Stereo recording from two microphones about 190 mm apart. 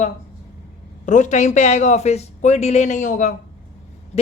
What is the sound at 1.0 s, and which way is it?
Speech, 40° left (ahead or behind).